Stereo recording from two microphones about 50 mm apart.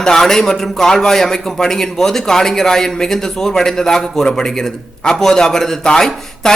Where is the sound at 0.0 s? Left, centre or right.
Centre.